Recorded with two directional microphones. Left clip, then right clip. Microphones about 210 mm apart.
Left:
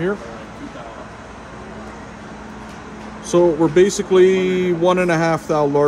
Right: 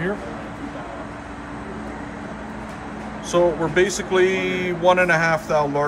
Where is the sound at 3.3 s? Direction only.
50° left (ahead or behind).